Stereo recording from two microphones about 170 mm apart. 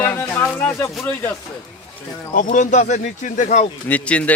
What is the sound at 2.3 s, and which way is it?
Speech, 50° left (ahead or behind).